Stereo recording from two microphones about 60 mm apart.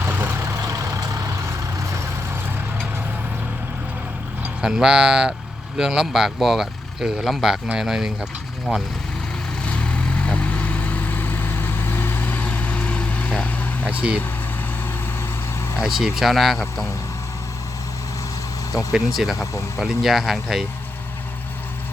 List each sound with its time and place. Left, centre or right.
0.0 s vehicle: right
0.6 s vehicle: right
4.6 s speech: centre
9.6 s vehicle: left
13.9 s speech: right
15.8 s speech: centre
18.9 s speech: centre
19.4 s speech: left
19.8 s speech: centre